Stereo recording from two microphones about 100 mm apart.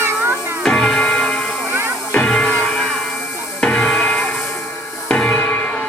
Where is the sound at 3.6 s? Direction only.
5° left (ahead or behind).